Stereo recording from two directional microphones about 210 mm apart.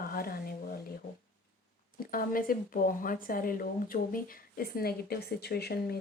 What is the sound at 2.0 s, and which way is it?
Speech, 45° left (ahead or behind).